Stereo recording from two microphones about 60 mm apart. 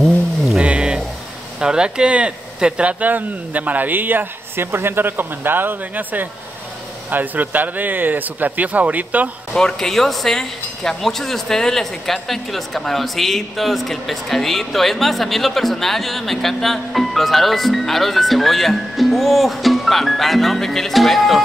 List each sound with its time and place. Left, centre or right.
0.6 s a sound: centre
1.6 s speech: centre
9.5 s speech: centre